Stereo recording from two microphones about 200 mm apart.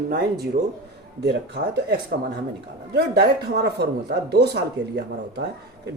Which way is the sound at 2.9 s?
55° right (ahead or behind).